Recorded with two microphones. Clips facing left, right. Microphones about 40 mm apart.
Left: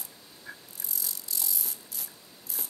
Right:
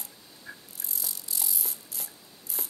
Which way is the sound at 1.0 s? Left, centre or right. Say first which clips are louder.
Right 1 dB; centre.